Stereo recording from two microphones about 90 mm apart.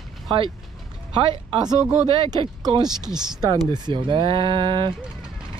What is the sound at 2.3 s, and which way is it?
Speech, 50° right (ahead or behind).